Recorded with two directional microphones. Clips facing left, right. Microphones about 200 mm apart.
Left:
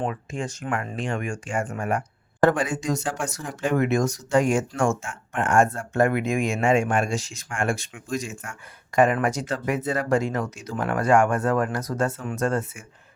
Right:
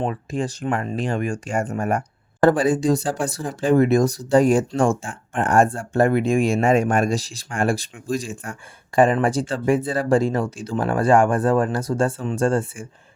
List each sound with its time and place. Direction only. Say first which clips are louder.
0.0 s speech: right 4 dB; 35° right (ahead or behind)